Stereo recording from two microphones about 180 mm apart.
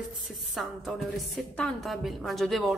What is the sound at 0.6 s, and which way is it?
A woman's voice, centre (ahead or behind).